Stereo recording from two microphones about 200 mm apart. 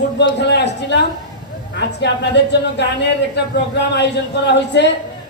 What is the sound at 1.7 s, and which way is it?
A man's voice, 60° left (ahead or behind).